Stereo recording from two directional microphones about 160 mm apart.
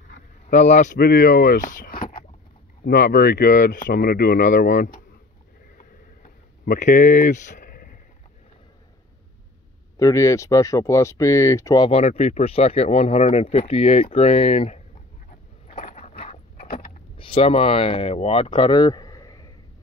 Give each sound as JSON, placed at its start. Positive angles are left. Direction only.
{"t": 0.5, "sound": "a man's voice", "side_deg": 50}
{"t": 0.9, "sound": "speech", "side_deg": 70}
{"t": 6.6, "sound": "speech", "side_deg": 55}
{"t": 9.9, "sound": "speech", "side_deg": 20}
{"t": 11.9, "sound": "speech", "side_deg": 40}
{"t": 15.7, "sound": "a sound", "side_deg": 60}
{"t": 16.0, "sound": "a sound", "side_deg": 40}
{"t": 17.2, "sound": "speech", "side_deg": 35}